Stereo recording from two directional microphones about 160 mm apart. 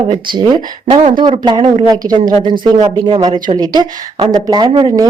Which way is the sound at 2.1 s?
50° right (ahead or behind).